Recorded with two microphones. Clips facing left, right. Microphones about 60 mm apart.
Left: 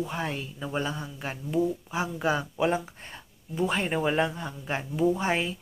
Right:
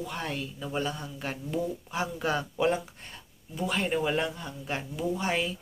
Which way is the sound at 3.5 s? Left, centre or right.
Left.